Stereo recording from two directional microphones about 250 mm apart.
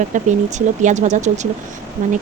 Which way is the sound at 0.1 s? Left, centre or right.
Right.